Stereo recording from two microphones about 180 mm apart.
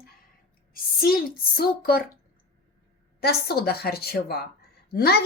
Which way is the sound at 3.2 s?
60° left (ahead or behind).